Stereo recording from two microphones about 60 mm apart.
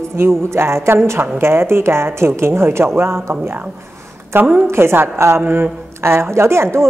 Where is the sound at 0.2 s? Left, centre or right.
Right.